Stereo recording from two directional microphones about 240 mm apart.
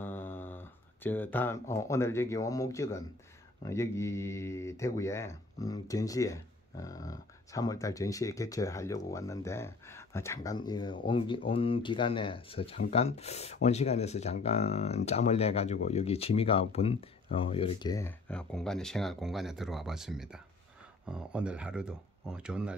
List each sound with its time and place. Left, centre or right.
0.0 s speech: centre